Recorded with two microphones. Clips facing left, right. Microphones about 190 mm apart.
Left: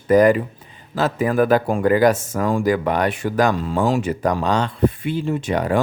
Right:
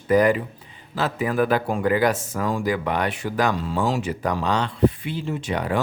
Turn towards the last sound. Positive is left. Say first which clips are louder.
# left 5 dB
turn(degrees=45)  # may be behind; listen again after turning